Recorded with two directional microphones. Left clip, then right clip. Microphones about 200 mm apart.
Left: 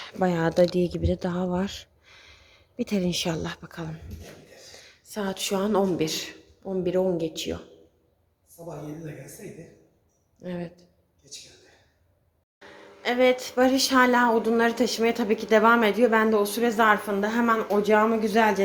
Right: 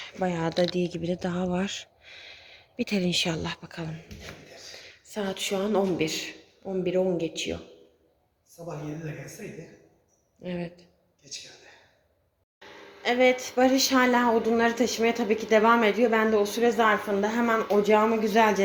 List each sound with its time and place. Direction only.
0.0 s a woman's voice: 15° left (ahead or behind)
10.4 s speech: 5° left (ahead or behind)
12.5 s a sound: 5° left (ahead or behind)
13.4 s a woman's voice: 5° left (ahead or behind)